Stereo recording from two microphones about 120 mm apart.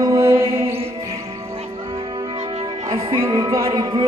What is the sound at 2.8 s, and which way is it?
Music, 50° right (ahead or behind).